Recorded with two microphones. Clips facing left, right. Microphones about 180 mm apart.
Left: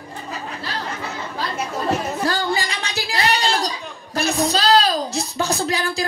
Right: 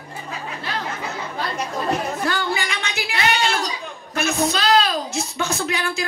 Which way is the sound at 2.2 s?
35° left (ahead or behind).